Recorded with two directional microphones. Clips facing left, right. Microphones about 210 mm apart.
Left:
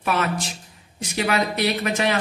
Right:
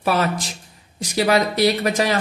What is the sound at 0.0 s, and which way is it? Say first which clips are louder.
Speech: right 3 dB; 35° right (ahead or behind).